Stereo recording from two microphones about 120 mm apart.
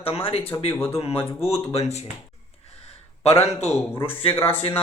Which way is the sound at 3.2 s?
60° left (ahead or behind).